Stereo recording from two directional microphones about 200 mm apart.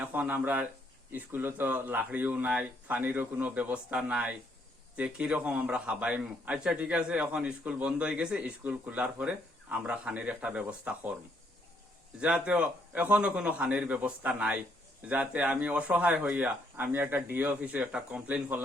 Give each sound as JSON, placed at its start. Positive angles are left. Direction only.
{"t": 0.0, "sound": "a man's voice", "side_deg": -10}
{"t": 12.2, "sound": "speech", "side_deg": -5}